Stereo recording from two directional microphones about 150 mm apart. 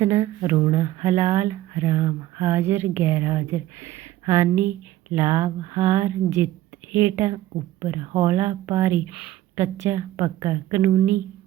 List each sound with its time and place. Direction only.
0.0 s speech: 20° right (ahead or behind)